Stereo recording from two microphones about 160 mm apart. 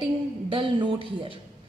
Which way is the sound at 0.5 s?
35° right (ahead or behind).